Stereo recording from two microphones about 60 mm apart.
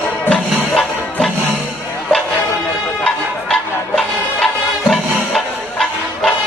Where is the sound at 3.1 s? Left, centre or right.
Centre.